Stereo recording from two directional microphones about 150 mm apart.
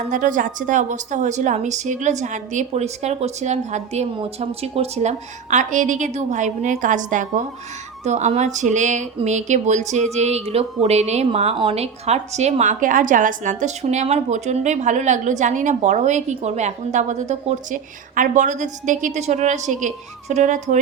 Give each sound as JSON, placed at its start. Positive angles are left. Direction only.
{"t": 0.1, "sound": "a woman's voice", "side_deg": -60}